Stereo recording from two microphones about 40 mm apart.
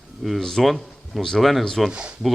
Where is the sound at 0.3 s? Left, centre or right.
Centre.